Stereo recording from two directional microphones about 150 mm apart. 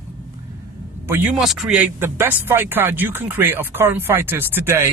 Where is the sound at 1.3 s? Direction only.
Centre (ahead or behind).